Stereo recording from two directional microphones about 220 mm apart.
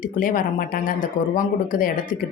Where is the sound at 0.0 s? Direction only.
40° left (ahead or behind).